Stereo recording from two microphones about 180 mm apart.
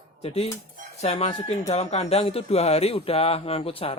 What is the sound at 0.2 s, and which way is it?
Speech, 35° left (ahead or behind).